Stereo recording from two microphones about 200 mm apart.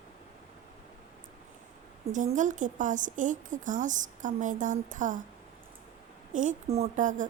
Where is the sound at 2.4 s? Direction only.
40° right (ahead or behind).